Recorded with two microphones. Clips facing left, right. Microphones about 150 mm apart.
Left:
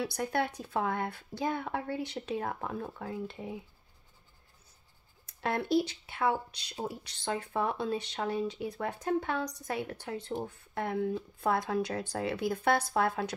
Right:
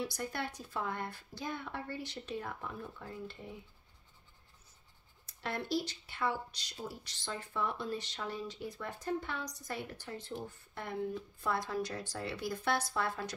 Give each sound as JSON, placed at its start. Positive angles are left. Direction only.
{"t": 0.0, "sound": "speech", "side_deg": 65}
{"t": 2.5, "sound": "speech", "side_deg": 60}
{"t": 5.2, "sound": "speech", "side_deg": 55}